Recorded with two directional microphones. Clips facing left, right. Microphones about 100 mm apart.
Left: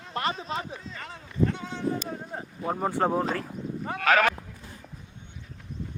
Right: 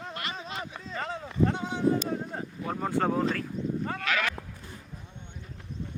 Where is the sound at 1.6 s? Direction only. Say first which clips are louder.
Right 3 dB; 15° right (ahead or behind).